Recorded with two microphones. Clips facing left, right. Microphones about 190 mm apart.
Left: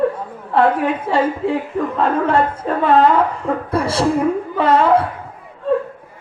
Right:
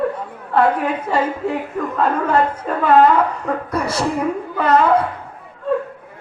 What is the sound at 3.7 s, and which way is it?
A man's voice, 30° left (ahead or behind).